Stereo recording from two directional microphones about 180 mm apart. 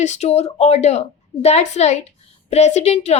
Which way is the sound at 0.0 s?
40° left (ahead or behind).